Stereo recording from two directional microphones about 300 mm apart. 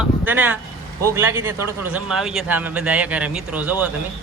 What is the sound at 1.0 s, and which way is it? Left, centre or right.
A man's voice, centre.